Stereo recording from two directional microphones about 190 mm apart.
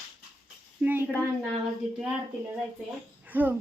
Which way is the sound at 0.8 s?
10° right (ahead or behind).